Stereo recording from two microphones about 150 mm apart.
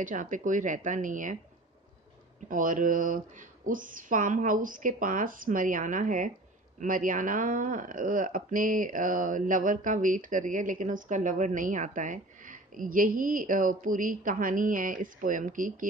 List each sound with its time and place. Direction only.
0.0 s speech: 60° right (ahead or behind)
2.4 s speech: 60° right (ahead or behind)